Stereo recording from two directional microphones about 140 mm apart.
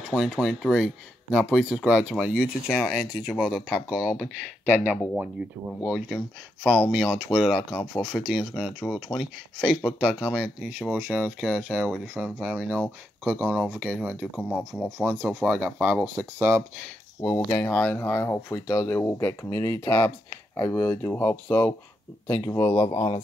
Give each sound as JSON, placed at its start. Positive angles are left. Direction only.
{"t": 0.1, "sound": "speech", "side_deg": 0}
{"t": 13.2, "sound": "speech", "side_deg": -15}
{"t": 16.2, "sound": "speech", "side_deg": -20}
{"t": 17.5, "sound": "speech", "side_deg": 15}
{"t": 22.8, "sound": "speech", "side_deg": 40}